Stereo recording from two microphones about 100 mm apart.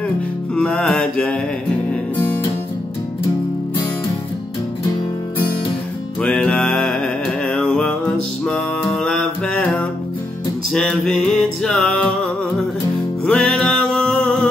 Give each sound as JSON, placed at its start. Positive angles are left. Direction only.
{"t": 0.6, "sound": "mantra", "side_deg": 10}
{"t": 6.2, "sound": "music", "side_deg": 10}